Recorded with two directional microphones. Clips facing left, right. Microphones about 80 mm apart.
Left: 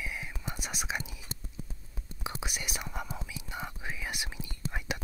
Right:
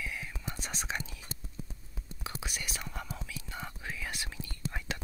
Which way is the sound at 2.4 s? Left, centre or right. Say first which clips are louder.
Left 2 dB; centre.